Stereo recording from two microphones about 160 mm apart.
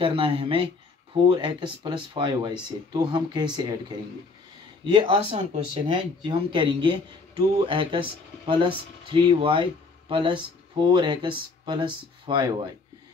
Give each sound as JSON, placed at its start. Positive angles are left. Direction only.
{"t": 0.0, "sound": "speech", "side_deg": -35}
{"t": 4.8, "sound": "speech", "side_deg": -35}